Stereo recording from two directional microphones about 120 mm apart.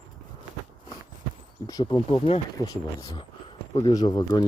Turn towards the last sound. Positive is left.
turn(degrees=35)  # may be behind; listen again after turning